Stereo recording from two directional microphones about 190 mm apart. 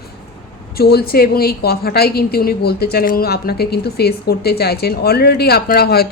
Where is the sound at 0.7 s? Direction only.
55° left (ahead or behind).